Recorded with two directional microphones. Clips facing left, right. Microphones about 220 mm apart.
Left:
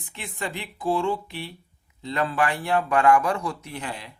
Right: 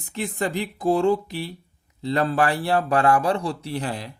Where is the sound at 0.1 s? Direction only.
40° right (ahead or behind).